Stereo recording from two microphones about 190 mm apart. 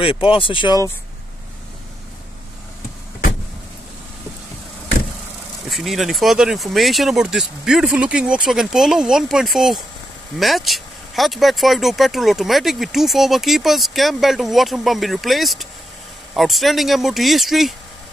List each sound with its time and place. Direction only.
0.0 s speech: 30° left (ahead or behind)
5.7 s speech: centre (ahead or behind)